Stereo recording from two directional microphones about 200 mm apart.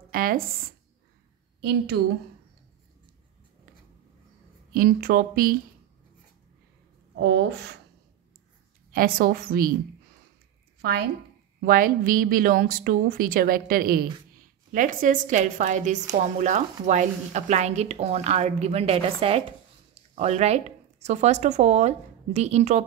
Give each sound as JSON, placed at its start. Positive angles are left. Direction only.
{"t": 0.1, "sound": "speech", "side_deg": -45}
{"t": 1.6, "sound": "speech", "side_deg": -55}
{"t": 4.7, "sound": "a woman's voice", "side_deg": -45}
{"t": 7.2, "sound": "speech", "side_deg": -60}
{"t": 8.9, "sound": "a woman's voice", "side_deg": -45}
{"t": 10.8, "sound": "a woman's voice", "side_deg": -55}